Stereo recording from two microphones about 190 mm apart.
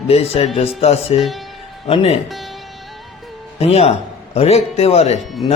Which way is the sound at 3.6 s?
30° left (ahead or behind).